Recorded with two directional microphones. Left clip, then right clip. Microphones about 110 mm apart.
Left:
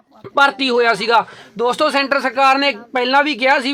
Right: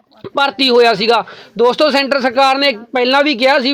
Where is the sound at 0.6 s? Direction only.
30° right (ahead or behind).